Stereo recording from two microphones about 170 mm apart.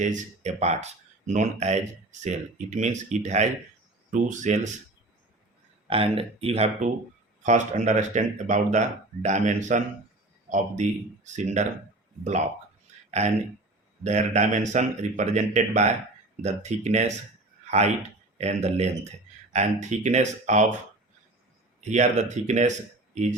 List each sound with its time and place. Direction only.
0.0 s a man's voice: 45° right (ahead or behind)
5.9 s a man's voice: 35° right (ahead or behind)
13.1 s a sound: 40° right (ahead or behind)
14.0 s a man's voice: 45° right (ahead or behind)
21.8 s a man's voice: 40° right (ahead or behind)